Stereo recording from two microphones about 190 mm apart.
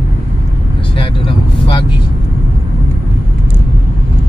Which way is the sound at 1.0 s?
25° left (ahead or behind).